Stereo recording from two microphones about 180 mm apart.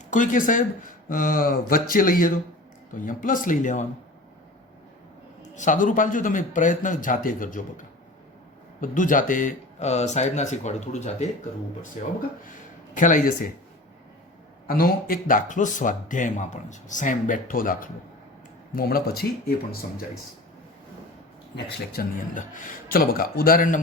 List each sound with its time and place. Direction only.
0.1 s speech: 45° left (ahead or behind)
5.4 s speech: 45° left (ahead or behind)
14.7 s speech: 55° left (ahead or behind)
22.0 s speech: 55° left (ahead or behind)